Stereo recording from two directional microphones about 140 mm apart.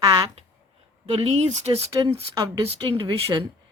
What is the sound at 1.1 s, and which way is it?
Speech, 45° right (ahead or behind).